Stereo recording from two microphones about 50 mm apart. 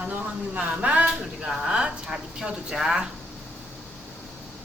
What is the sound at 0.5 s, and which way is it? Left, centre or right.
A woman's voice, right.